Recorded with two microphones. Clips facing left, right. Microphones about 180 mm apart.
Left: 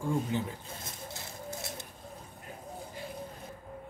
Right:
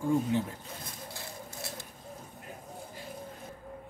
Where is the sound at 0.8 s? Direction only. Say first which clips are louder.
Even; 20° left (ahead or behind).